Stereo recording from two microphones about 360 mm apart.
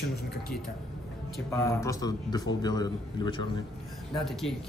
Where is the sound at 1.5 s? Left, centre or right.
Centre.